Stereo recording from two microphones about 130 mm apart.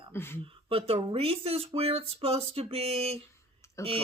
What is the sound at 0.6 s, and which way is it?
Speech, 45° right (ahead or behind).